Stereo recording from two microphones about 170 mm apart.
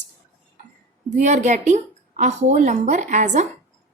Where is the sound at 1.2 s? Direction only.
45° right (ahead or behind).